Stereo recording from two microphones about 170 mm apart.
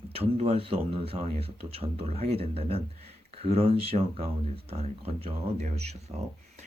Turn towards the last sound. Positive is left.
turn(degrees=-40)  # may be behind; listen again after turning